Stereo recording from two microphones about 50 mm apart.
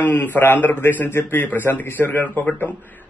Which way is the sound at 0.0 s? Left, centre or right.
Left.